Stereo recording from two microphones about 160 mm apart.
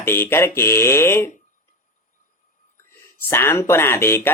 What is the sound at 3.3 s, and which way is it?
Speech, 15° left (ahead or behind).